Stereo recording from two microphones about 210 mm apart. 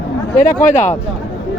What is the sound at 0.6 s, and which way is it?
Speech, 35° left (ahead or behind).